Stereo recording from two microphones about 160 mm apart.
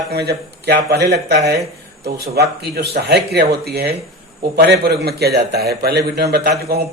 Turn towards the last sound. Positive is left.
turn(degrees=-80)